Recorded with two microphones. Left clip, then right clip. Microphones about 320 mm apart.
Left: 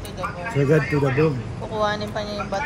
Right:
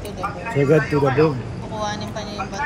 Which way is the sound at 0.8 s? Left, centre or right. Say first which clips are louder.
Right 3 dB; right.